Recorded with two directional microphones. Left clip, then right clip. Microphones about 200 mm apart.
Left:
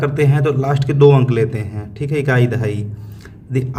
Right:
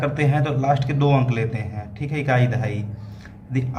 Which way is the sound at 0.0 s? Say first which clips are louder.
Left 6 dB; 40° left (ahead or behind).